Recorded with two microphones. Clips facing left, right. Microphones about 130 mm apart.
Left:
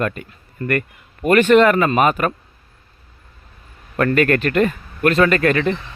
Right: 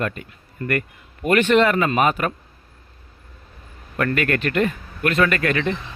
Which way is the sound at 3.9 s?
40° left (ahead or behind).